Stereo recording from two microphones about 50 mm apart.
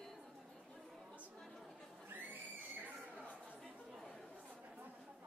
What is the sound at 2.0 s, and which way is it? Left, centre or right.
Neigh, right.